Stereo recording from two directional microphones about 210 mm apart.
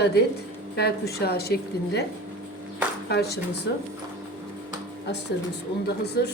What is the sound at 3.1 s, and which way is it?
Speech, 50° left (ahead or behind).